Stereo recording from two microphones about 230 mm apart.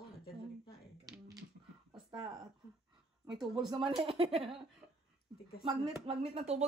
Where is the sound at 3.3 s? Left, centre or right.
Centre.